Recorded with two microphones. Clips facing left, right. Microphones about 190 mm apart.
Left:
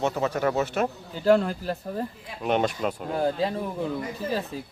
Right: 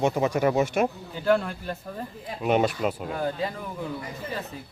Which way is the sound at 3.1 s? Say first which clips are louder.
Left 4 dB; 30° left (ahead or behind).